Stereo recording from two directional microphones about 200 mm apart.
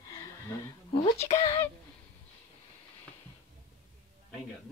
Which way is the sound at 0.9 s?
25° left (ahead or behind).